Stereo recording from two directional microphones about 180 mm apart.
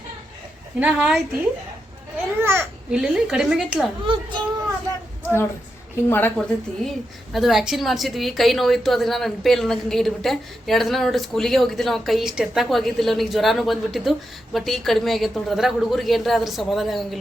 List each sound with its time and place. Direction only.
0.8 s a woman's voice: 5° right (ahead or behind)
4.0 s a child's voice: 25° right (ahead or behind)
6.1 s a woman's voice: 10° left (ahead or behind)